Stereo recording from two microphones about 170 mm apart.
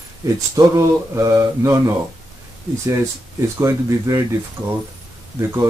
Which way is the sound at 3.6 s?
15° right (ahead or behind).